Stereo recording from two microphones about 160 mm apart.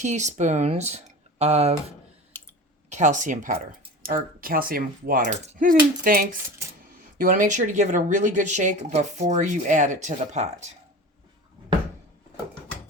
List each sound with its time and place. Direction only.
0.0 s speech: 50° right (ahead or behind)
2.3 s clicking: 15° left (ahead or behind)
2.9 s speech: 50° right (ahead or behind)
4.0 s speech: 65° right (ahead or behind); by 10.7 s 45° right (ahead or behind)